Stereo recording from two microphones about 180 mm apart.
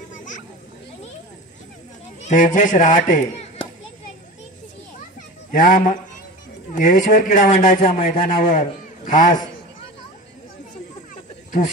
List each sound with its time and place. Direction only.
0.1 s a sound: 45° left (ahead or behind)
2.2 s a man's voice: 45° left (ahead or behind)
5.5 s a man's voice: 50° left (ahead or behind)